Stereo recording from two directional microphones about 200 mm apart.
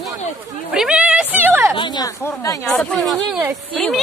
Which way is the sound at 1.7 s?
20° left (ahead or behind).